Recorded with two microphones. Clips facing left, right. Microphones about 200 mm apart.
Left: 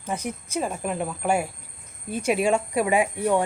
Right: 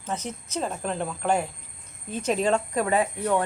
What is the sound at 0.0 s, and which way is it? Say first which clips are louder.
Speech: left 2 dB; 10° left (ahead or behind).